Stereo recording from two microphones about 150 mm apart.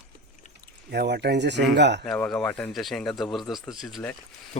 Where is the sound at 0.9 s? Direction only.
90° right.